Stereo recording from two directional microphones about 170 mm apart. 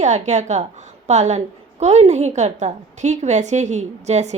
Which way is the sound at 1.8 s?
40° right (ahead or behind).